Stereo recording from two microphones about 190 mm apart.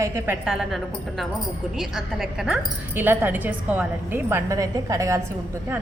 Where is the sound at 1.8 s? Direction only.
Centre (ahead or behind); by 5.2 s 15° right (ahead or behind).